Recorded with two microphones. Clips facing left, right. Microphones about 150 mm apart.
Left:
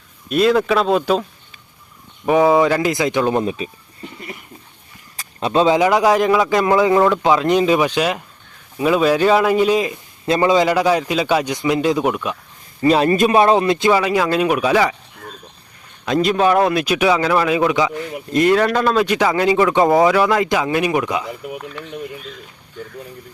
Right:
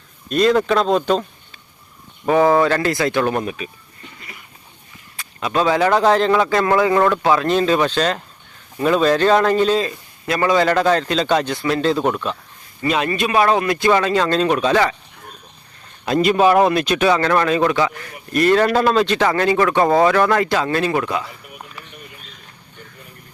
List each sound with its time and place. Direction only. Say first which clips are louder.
0.3 s speech: left 1 dB; 5° left (ahead or behind)
2.2 s speech: left 1 dB; 10° left (ahead or behind)
5.1 s speech: left 3 dB; 35° left (ahead or behind); by 12.4 s 10° left (ahead or behind)
12.8 s a man's voice: left 6 dB; 35° left (ahead or behind)
13.4 s speech: left 2 dB; 25° left (ahead or behind)
13.9 s speech: even; 10° left (ahead or behind)
16.0 s speech: right 1 dB; centre (ahead or behind)
16.8 s speech: even; 10° left (ahead or behind)
18.5 s speech: right 1 dB; 5° right (ahead or behind)
18.9 s speech: even; 10° left (ahead or behind)